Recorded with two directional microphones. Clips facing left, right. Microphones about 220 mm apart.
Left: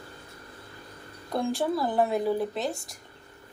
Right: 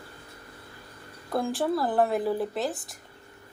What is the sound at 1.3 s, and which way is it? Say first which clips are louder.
A woman's voice: even; centre (ahead or behind).